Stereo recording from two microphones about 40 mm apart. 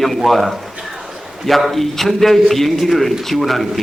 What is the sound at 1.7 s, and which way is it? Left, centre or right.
A man's voice, centre.